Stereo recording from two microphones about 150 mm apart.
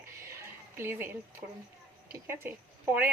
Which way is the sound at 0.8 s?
15° right (ahead or behind).